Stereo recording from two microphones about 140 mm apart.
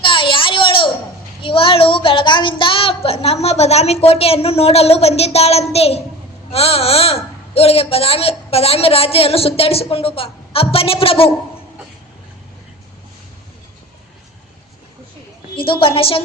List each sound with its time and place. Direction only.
0.0 s a sound: 35° left (ahead or behind)
1.4 s child singing: 40° left (ahead or behind)
6.5 s a man's voice: 45° left (ahead or behind)
15.5 s a woman's voice: 40° left (ahead or behind)